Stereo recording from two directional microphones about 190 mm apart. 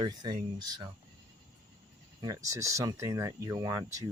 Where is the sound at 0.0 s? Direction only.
20° right (ahead or behind).